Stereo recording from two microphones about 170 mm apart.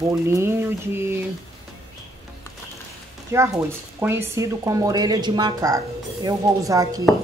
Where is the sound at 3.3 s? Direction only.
15° right (ahead or behind).